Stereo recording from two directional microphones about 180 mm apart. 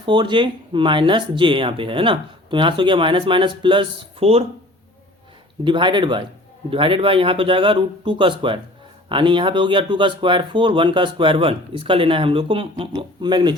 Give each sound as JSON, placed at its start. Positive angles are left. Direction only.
{"t": 0.0, "sound": "speech", "side_deg": -25}
{"t": 5.6, "sound": "speech", "side_deg": -25}